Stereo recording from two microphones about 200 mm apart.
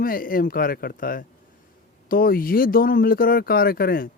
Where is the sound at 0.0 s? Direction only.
45° left (ahead or behind).